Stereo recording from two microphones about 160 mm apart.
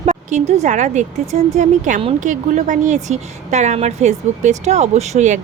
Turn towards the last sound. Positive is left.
turn(degrees=-45)  # may be behind; listen again after turning